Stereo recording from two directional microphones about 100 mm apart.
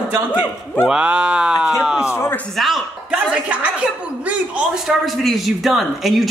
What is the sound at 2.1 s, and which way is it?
Speech, 25° left (ahead or behind).